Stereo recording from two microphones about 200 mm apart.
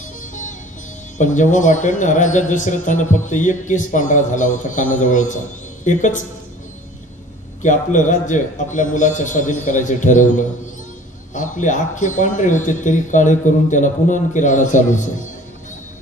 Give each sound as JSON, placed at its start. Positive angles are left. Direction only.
{"t": 0.2, "sound": "music", "side_deg": 40}
{"t": 1.1, "sound": "speech", "side_deg": 40}
{"t": 7.6, "sound": "speech", "side_deg": 40}